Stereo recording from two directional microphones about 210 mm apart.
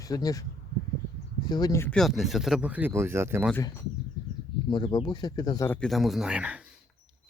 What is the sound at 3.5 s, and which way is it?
Speech, 10° left (ahead or behind).